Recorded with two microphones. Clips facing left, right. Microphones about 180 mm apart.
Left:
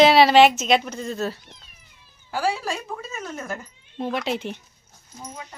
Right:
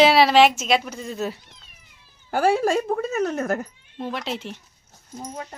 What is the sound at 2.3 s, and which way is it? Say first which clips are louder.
Speech: right 6 dB; 55° right (ahead or behind).